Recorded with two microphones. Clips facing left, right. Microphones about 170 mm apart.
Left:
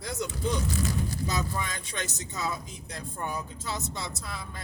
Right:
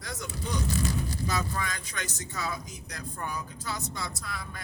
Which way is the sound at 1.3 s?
20° left (ahead or behind).